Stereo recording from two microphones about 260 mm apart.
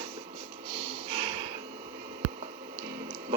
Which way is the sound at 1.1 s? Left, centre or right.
Centre.